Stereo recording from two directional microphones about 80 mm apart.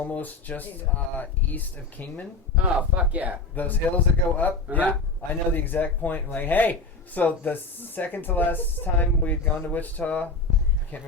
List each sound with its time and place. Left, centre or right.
0.0 s a man's voice: left
3.0 s speech: centre
3.5 s a man's voice: left